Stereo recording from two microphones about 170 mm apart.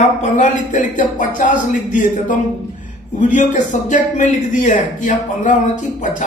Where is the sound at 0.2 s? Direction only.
45° left (ahead or behind).